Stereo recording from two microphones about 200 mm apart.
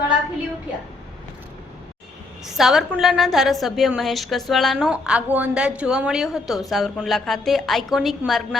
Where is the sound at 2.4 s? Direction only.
Centre (ahead or behind).